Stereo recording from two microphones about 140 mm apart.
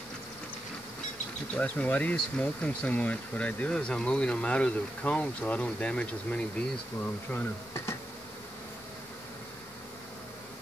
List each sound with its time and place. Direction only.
1.5 s speech: 10° left (ahead or behind)